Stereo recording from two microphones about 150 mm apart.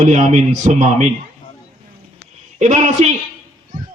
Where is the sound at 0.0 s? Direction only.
50° right (ahead or behind).